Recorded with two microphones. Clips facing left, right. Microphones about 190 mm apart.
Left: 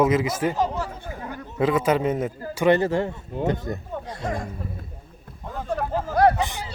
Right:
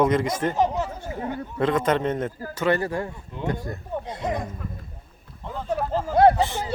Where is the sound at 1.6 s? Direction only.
5° left (ahead or behind).